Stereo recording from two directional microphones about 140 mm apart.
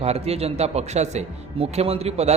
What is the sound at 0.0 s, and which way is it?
A man's voice, 50° right (ahead or behind).